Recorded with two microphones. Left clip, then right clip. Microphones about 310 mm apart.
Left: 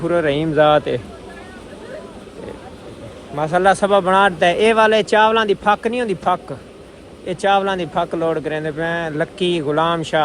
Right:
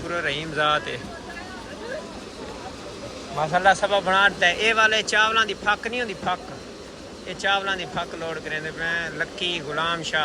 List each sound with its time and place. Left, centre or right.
0.1 s speech: centre
3.5 s speech: centre